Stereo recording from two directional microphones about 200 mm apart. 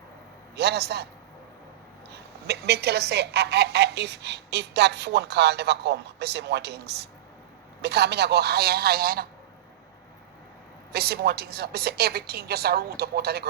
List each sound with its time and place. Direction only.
0.5 s a woman's voice: 55° right (ahead or behind)
2.5 s a woman's voice: 55° right (ahead or behind)
10.9 s a woman's voice: 50° right (ahead or behind)